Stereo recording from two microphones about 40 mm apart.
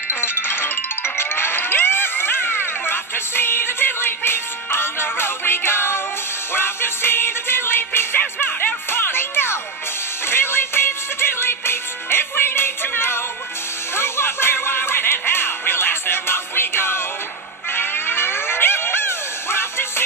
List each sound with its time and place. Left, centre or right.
0.2 s music: left
8.4 s music: left
13.9 s music: left
17.7 s a sound: left